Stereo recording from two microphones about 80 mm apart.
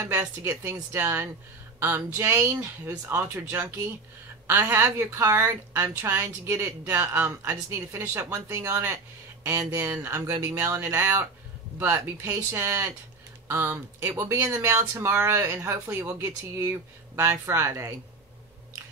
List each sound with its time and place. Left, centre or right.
0.0 s a woman's voice: right